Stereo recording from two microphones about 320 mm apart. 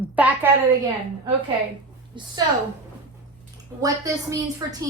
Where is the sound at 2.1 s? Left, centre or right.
Centre.